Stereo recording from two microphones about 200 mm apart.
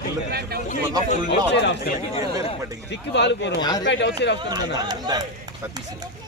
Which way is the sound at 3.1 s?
60° left (ahead or behind).